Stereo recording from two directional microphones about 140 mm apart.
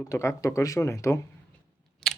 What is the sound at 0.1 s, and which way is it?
Speech, 20° left (ahead or behind).